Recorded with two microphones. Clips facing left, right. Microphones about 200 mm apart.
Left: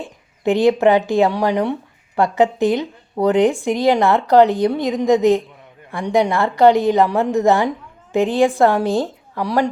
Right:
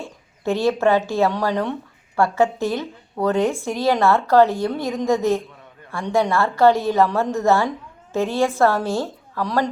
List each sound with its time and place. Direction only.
0.0 s a woman's voice: 15° left (ahead or behind)